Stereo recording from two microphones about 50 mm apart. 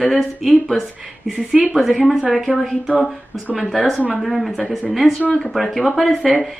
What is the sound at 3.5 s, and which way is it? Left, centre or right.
A woman's voice, centre.